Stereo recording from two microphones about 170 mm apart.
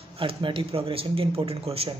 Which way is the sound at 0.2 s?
30° right (ahead or behind).